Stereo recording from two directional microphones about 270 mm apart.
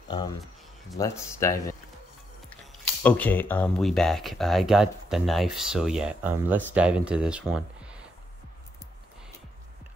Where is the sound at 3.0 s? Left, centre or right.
Centre.